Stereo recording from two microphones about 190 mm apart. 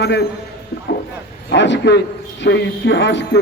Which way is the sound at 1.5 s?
70° left (ahead or behind).